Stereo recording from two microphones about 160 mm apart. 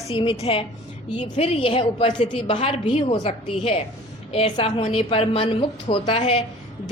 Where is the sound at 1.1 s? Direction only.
45° left (ahead or behind).